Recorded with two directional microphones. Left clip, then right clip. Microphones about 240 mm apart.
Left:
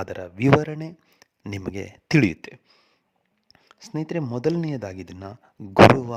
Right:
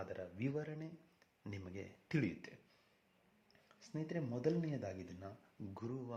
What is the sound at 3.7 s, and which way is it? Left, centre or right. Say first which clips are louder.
Speech: left 16 dB; left.